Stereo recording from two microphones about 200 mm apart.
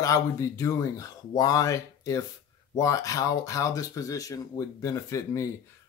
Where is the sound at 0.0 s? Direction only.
15° left (ahead or behind).